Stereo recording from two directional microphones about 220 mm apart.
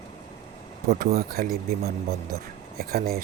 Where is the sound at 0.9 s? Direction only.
45° right (ahead or behind).